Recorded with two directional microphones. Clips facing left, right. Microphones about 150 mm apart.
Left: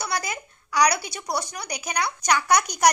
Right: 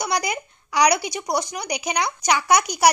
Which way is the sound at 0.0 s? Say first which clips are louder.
Right 5 dB; 15° right (ahead or behind).